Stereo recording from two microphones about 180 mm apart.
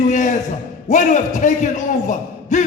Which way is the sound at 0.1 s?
45° left (ahead or behind).